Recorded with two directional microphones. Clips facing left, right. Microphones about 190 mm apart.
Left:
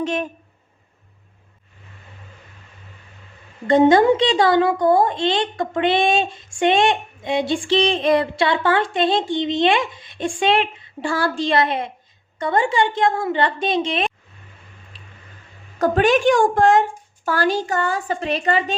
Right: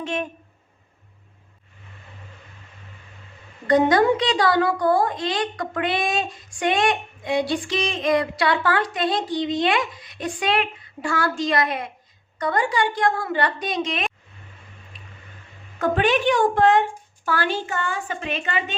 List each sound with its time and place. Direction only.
0.0 s speech: 40° left (ahead or behind)
3.7 s a woman's voice: 25° left (ahead or behind)
14.9 s a sound: 30° left (ahead or behind)
15.8 s a woman's voice: 45° left (ahead or behind)